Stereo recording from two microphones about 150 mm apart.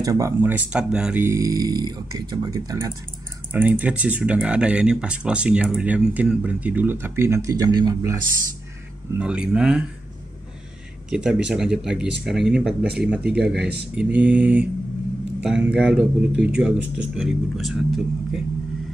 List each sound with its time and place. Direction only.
0.0 s speech: 20° right (ahead or behind)
3.5 s speech: 10° right (ahead or behind)
9.2 s speech: 5° right (ahead or behind)
11.1 s speech: 5° right (ahead or behind)